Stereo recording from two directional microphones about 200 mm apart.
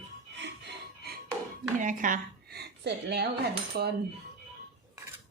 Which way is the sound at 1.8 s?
40° right (ahead or behind).